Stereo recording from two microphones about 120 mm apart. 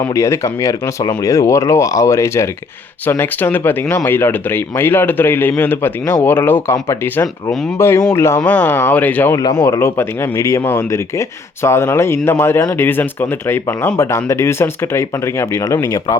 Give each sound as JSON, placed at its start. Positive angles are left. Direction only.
{"t": 0.1, "sound": "speech", "side_deg": 25}
{"t": 9.3, "sound": "speech", "side_deg": 30}